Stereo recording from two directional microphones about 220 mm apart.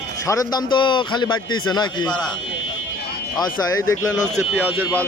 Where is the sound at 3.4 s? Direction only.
15° left (ahead or behind).